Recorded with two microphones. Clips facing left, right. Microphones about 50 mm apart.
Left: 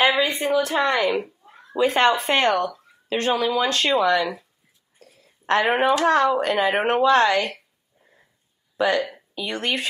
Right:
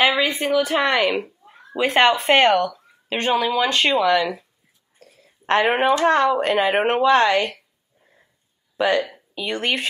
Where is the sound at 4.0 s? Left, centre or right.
Centre.